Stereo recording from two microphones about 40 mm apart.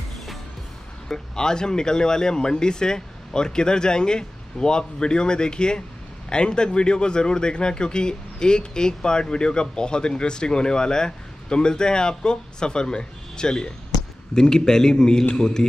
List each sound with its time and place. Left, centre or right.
1.0 s a man's voice: centre